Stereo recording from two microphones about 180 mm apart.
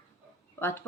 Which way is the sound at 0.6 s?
15° left (ahead or behind).